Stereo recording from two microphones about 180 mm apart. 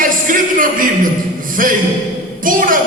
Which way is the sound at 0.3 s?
50° right (ahead or behind).